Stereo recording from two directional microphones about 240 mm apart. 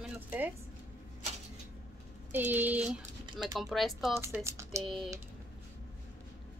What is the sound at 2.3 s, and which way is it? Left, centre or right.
A woman's voice, centre.